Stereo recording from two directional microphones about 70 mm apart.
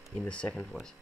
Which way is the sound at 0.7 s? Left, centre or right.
Centre.